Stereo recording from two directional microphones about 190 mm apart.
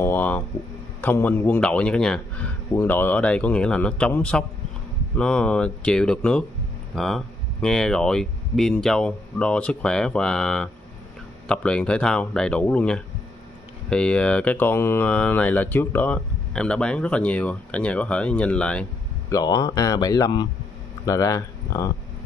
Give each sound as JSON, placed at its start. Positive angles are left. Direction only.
{"t": 0.0, "sound": "a sound", "side_deg": 10}
{"t": 1.0, "sound": "speech", "side_deg": 10}
{"t": 19.3, "sound": "speech", "side_deg": 20}